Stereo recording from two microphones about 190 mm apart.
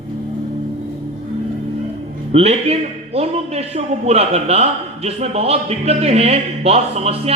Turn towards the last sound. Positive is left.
turn(degrees=-35)  # may be behind; listen again after turning